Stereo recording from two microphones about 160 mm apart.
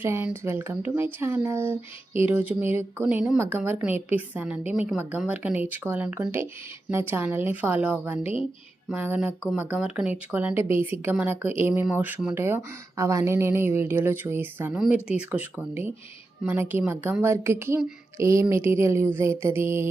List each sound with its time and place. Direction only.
0.0 s speech: 15° right (ahead or behind)